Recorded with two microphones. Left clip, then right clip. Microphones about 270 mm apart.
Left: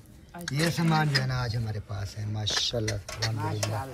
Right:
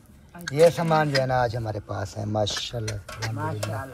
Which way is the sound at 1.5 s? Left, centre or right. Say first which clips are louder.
Right 9 dB; centre.